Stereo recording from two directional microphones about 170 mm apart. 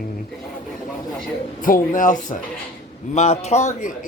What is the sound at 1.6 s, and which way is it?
A woman's voice, 50° left (ahead or behind).